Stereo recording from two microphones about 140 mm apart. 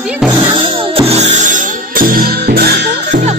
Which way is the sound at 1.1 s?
55° right (ahead or behind).